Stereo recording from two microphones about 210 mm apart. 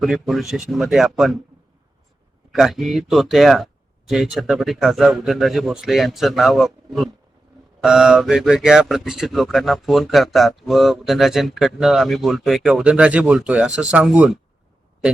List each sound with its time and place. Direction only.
0.0 s speech: centre (ahead or behind)
2.5 s speech: centre (ahead or behind)